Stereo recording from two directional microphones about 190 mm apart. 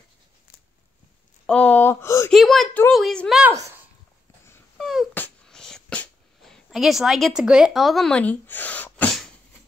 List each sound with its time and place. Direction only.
1.4 s speech: 5° left (ahead or behind)
2.3 s a woman's voice: centre (ahead or behind)
3.5 s speech: 15° right (ahead or behind)
4.7 s dog: centre (ahead or behind)
5.2 s a sound: 5° left (ahead or behind)